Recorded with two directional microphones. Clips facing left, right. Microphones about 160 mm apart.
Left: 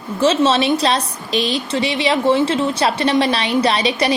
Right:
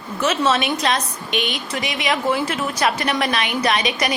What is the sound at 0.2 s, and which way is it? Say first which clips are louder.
A woman's voice: left 5 dB; 30° left (ahead or behind).